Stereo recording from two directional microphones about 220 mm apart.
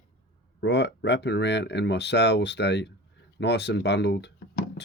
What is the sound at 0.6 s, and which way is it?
Speech, 50° left (ahead or behind).